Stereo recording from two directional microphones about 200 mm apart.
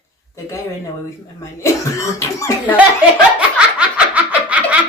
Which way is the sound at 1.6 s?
15° left (ahead or behind).